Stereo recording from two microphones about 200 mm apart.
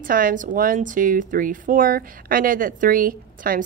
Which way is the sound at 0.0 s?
45° right (ahead or behind).